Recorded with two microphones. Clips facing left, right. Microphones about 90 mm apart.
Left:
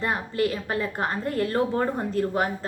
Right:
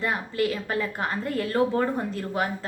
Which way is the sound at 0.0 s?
30° left (ahead or behind).